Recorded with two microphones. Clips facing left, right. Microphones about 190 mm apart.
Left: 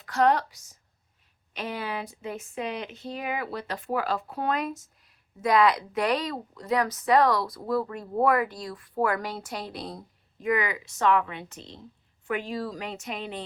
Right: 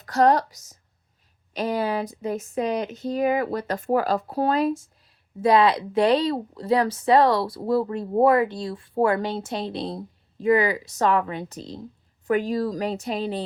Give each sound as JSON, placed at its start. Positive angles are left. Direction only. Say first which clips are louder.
{"t": 0.0, "sound": "a woman's voice", "louder": "right 4 dB", "side_deg": -40}